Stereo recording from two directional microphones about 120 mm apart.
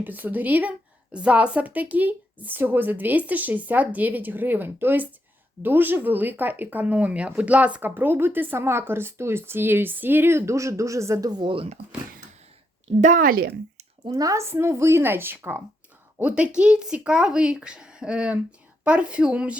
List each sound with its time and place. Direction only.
0.0 s speech: 15° right (ahead or behind); by 11.7 s 45° right (ahead or behind)
14.1 s speech: 30° right (ahead or behind); by 19.5 s 10° right (ahead or behind)